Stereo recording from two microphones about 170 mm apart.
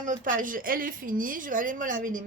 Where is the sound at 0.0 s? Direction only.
50° right (ahead or behind).